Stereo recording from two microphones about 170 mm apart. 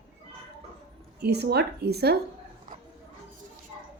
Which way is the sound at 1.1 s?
75° right (ahead or behind).